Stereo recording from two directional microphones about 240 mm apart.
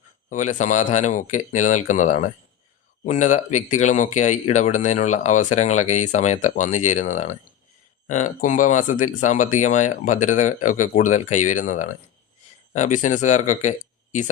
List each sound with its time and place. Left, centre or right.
0.3 s speech: left